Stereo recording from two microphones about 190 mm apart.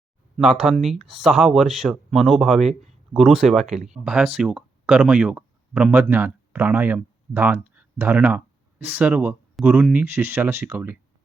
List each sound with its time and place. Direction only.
0.3 s speech: centre (ahead or behind)